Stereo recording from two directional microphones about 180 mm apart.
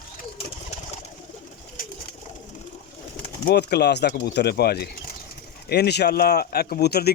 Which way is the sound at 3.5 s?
65° left (ahead or behind).